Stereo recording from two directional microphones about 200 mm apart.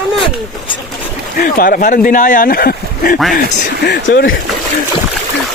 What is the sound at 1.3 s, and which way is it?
Speech, 45° left (ahead or behind).